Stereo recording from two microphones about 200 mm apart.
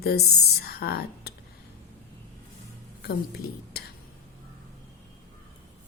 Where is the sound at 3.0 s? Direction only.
50° left (ahead or behind).